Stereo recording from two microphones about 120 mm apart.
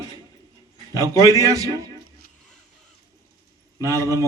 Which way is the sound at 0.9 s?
30° right (ahead or behind).